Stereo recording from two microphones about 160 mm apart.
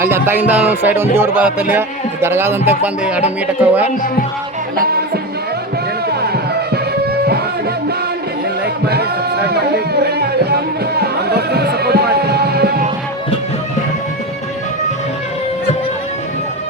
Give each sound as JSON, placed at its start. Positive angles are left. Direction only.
{"t": 0.0, "sound": "speech", "side_deg": -15}
{"t": 4.8, "sound": "music", "side_deg": -75}
{"t": 8.6, "sound": "music", "side_deg": -90}